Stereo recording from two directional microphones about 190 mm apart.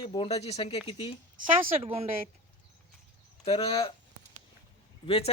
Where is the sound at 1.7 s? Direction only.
30° right (ahead or behind).